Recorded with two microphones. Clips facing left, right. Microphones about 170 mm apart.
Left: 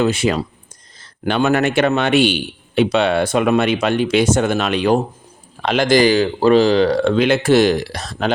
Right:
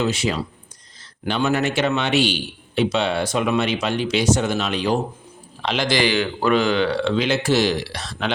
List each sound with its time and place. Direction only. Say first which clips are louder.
0.0 s a man's voice: left 5 dB; 55° left (ahead or behind)